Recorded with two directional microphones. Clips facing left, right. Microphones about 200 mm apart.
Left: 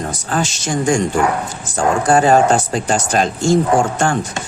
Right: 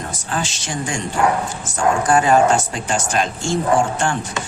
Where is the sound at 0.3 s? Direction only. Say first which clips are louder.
Left 5 dB; 45° left (ahead or behind).